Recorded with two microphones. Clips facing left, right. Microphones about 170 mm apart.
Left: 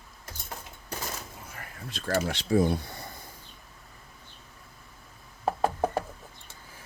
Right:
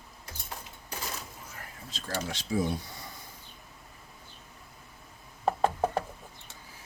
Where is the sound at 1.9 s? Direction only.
60° left (ahead or behind).